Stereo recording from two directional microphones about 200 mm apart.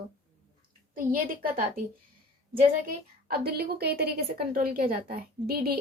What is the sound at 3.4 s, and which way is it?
A woman's voice, 50° right (ahead or behind).